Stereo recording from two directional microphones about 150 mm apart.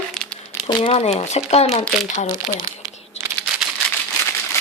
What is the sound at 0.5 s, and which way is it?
Speech, 40° left (ahead or behind).